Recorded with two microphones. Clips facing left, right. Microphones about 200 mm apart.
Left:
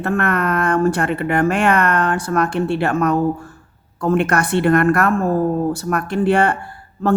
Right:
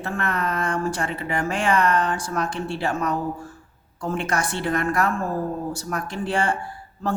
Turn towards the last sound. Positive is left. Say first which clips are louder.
# left 7 dB
turn(degrees=60)  # may be behind; listen again after turning